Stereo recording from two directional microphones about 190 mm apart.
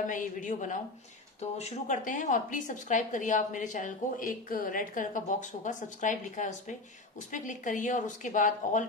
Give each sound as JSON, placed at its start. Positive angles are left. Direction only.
{"t": 0.0, "sound": "a woman's voice", "side_deg": 45}